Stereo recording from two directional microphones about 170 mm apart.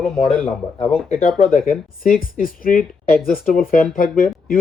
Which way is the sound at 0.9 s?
40° left (ahead or behind).